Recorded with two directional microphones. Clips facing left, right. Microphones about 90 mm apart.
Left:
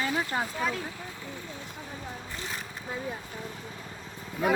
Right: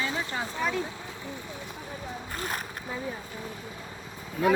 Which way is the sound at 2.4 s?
55° right (ahead or behind).